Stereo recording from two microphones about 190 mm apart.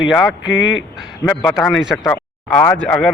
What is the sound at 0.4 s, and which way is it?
Speech, 80° left.